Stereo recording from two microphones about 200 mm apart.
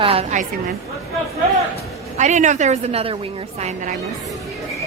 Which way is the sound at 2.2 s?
35° right (ahead or behind).